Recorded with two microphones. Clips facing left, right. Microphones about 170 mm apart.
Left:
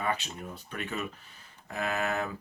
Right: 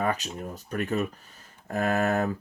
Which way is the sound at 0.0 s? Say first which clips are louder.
Right 4 dB; 40° right (ahead or behind).